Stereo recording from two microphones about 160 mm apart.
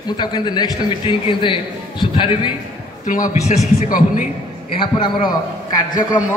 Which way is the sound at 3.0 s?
55° left (ahead or behind).